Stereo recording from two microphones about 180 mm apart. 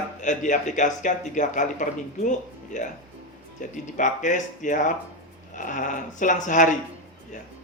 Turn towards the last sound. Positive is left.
turn(degrees=45)  # may be behind; listen again after turning